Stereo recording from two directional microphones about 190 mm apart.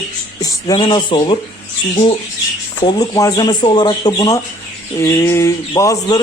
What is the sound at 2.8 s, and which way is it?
Speech, 20° left (ahead or behind).